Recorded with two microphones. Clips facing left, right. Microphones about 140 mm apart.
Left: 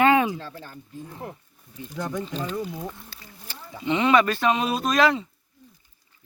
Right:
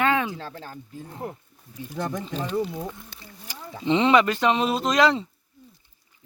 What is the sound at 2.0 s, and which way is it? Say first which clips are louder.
Speech: left 2 dB; 45° right (ahead or behind).